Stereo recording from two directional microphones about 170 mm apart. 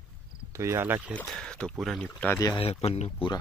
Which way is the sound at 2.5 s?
35° left (ahead or behind).